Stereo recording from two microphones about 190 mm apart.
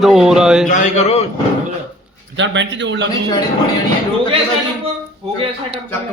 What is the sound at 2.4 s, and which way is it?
Speech, 70° right (ahead or behind).